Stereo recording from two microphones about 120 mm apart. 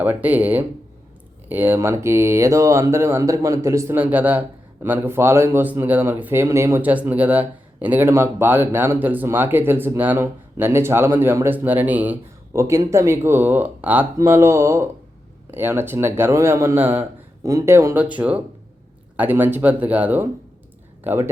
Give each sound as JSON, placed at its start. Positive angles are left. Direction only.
{"t": 0.0, "sound": "speech", "side_deg": -15}
{"t": 3.9, "sound": "speech", "side_deg": -15}